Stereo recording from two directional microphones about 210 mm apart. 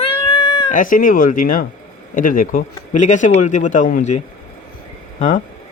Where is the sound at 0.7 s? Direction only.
40° left (ahead or behind).